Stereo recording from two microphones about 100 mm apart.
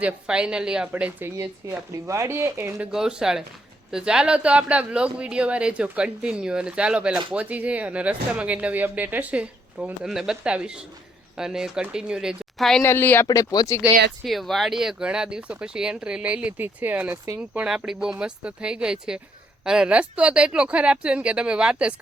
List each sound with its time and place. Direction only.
0.0 s speech: 10° right (ahead or behind)
2.0 s speech: 30° right (ahead or behind)
2.7 s speech: 5° right (ahead or behind)
12.8 s speech: 25° left (ahead or behind)
13.2 s speech: 40° left (ahead or behind)
14.3 s speech: centre (ahead or behind); by 17.2 s 15° right (ahead or behind)
17.7 s speech: 5° right (ahead or behind)